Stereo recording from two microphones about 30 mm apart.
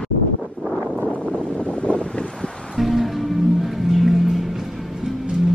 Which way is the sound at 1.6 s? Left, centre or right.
Left.